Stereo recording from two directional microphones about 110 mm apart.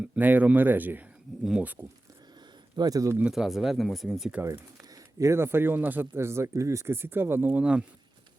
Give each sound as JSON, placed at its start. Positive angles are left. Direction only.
{"t": 0.0, "sound": "speech", "side_deg": -15}
{"t": 2.7, "sound": "speech", "side_deg": -35}
{"t": 3.2, "sound": "speech", "side_deg": -5}
{"t": 4.4, "sound": "speech", "side_deg": -25}